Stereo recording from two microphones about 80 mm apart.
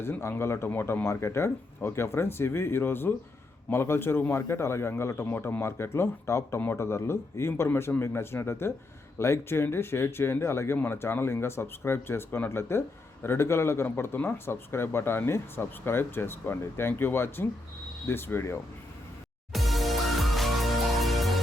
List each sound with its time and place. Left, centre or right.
0.0 s speech: left
19.5 s music: centre